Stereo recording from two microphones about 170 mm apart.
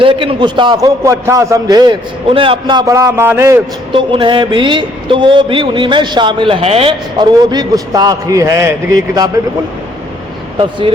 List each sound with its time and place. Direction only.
0.0 s speech: 30° right (ahead or behind); by 3.6 s 15° right (ahead or behind)
3.9 s speech: 30° right (ahead or behind)
10.6 s speech: 30° right (ahead or behind)